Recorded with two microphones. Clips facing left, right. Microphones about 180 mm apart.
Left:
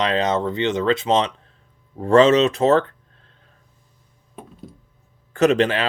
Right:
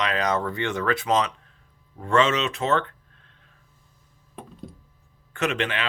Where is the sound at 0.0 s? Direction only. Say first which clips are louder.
Left 5 dB; 30° left (ahead or behind).